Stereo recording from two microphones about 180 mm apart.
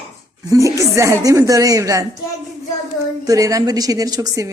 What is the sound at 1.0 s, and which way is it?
A woman's voice, 15° right (ahead or behind).